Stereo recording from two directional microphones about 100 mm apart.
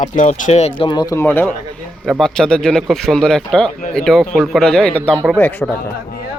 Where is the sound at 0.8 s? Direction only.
45° left (ahead or behind).